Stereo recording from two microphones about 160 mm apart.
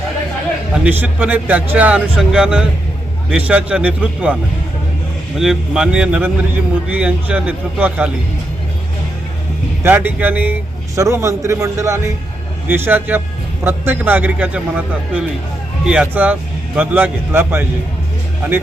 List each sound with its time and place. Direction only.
0.7 s a man's voice: 10° right (ahead or behind)
5.4 s a man's voice: 5° right (ahead or behind)
9.8 s a man's voice: 10° right (ahead or behind)